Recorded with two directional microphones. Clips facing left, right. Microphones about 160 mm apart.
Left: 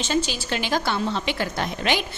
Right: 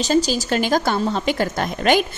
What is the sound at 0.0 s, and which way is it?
A woman's voice, 40° right (ahead or behind).